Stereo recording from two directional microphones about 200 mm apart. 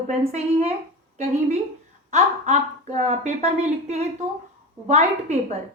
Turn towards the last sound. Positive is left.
turn(degrees=-35)  # may be behind; listen again after turning